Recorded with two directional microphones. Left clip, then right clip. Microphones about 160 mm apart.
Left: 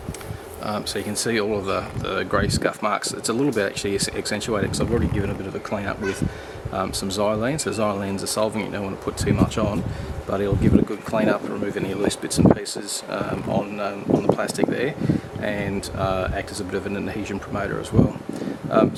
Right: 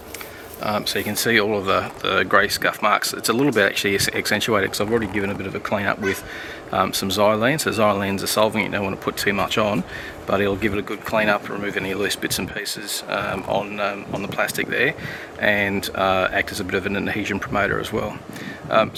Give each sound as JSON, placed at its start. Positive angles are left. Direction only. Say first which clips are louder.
{"t": 0.6, "sound": "speech", "louder": "right 4 dB", "side_deg": -15}